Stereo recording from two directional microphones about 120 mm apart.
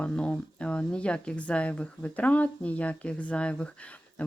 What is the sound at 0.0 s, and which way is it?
Speech, 10° left (ahead or behind).